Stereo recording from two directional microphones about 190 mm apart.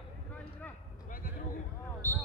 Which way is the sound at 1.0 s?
45° left (ahead or behind).